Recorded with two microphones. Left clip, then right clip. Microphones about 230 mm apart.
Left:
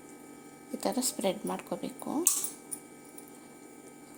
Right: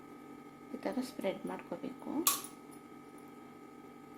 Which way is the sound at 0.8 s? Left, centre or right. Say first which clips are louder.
Left 7 dB; left.